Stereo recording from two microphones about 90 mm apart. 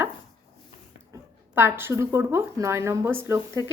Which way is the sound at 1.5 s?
25° right (ahead or behind).